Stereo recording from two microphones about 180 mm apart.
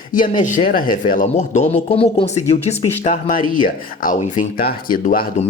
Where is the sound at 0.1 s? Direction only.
45° left (ahead or behind).